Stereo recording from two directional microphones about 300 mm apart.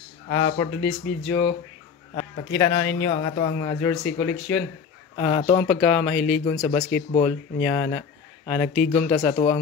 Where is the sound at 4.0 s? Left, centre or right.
Left.